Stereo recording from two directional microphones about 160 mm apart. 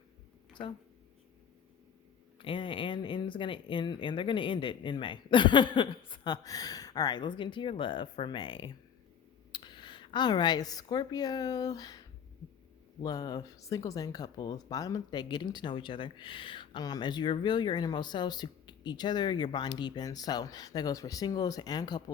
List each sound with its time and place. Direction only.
2.4 s speech: 35° left (ahead or behind)